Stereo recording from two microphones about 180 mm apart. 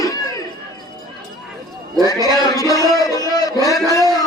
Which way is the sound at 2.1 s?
20° left (ahead or behind).